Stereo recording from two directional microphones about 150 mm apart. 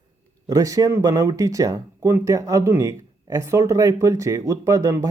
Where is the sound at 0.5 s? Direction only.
20° right (ahead or behind).